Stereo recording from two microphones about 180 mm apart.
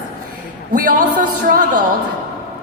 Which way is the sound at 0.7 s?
50° right (ahead or behind).